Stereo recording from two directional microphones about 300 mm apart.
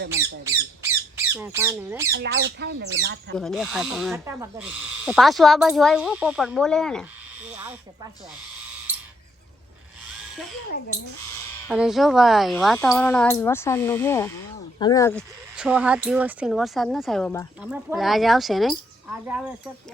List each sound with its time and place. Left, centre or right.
0.2 s squawk: centre
2.1 s speech: right
3.3 s a woman's voice: centre
11.7 s a woman's voice: centre
15.5 s a woman's voice: centre